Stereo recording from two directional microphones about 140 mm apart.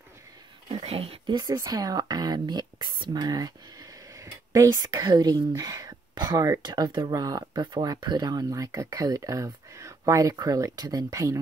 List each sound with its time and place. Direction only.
0.7 s speech: 45° right (ahead or behind); by 11.3 s 25° right (ahead or behind)